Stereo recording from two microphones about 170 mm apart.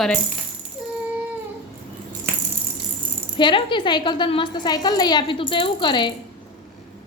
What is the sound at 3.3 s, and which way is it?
A woman's voice, 30° left (ahead or behind).